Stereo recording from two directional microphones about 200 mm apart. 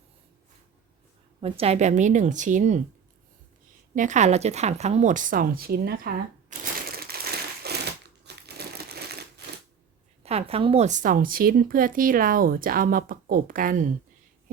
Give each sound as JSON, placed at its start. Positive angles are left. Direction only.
{"t": 1.4, "sound": "speech", "side_deg": -30}
{"t": 3.9, "sound": "a woman's voice", "side_deg": -40}
{"t": 7.6, "sound": "crumpling", "side_deg": -55}
{"t": 8.2, "sound": "crushing", "side_deg": -55}
{"t": 10.2, "sound": "a woman's voice", "side_deg": -30}